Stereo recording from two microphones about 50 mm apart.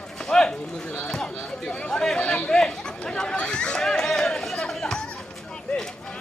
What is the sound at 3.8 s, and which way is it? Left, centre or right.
Music, centre.